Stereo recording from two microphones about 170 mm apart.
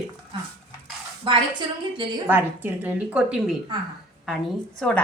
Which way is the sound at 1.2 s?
30° right (ahead or behind).